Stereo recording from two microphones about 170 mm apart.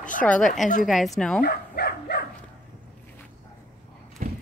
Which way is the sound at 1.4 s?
70° left (ahead or behind).